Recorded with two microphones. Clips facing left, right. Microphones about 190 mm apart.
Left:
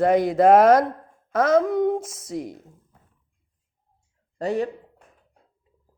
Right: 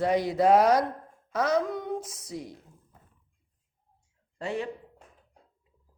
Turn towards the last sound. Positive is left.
turn(degrees=40)  # may be behind; listen again after turning